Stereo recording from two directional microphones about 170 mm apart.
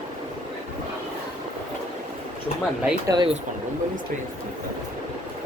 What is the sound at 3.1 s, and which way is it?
Speech, 25° right (ahead or behind).